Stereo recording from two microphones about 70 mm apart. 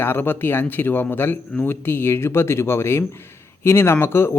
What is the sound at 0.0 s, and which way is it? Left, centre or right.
A man's voice, left.